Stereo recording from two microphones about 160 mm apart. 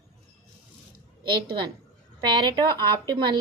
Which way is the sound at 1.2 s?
30° right (ahead or behind).